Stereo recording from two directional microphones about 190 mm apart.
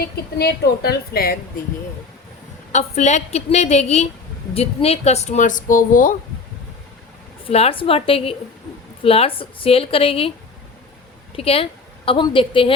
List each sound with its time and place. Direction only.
0.0 s a woman's voice: 55° left (ahead or behind)
2.7 s speech: 35° left (ahead or behind)
7.4 s a woman's voice: 30° left (ahead or behind)
11.3 s a woman's voice: 30° left (ahead or behind)